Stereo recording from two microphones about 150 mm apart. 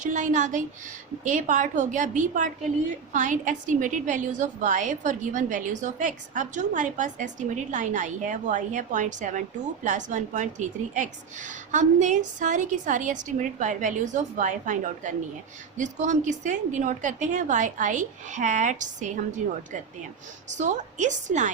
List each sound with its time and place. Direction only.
0.0 s a woman's voice: 55° right (ahead or behind)